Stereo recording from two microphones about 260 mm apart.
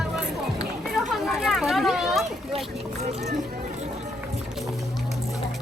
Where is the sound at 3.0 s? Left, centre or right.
Right.